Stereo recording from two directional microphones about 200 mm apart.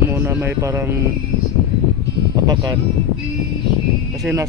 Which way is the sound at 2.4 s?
20° right (ahead or behind).